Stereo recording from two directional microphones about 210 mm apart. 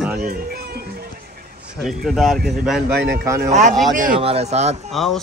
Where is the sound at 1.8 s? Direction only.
Centre (ahead or behind).